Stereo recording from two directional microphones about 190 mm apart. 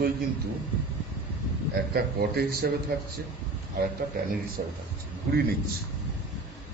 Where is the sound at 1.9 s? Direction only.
55° right (ahead or behind).